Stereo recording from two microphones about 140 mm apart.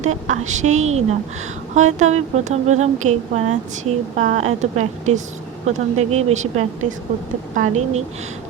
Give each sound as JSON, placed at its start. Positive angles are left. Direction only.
{"t": 0.0, "sound": "a woman's voice", "side_deg": -55}